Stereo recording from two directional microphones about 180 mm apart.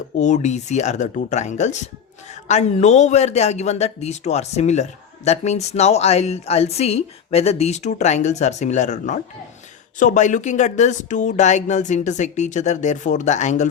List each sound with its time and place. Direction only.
0.2 s speech: 40° left (ahead or behind)